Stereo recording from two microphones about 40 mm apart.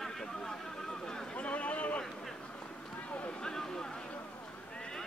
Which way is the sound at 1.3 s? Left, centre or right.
Left.